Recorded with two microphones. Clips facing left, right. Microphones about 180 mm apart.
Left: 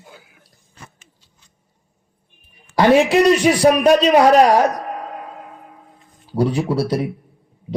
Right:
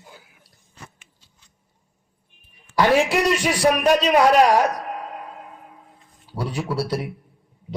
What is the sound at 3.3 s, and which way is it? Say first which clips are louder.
A man's voice: left 6 dB; 40° left (ahead or behind).